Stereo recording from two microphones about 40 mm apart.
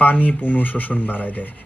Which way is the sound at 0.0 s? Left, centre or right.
Left.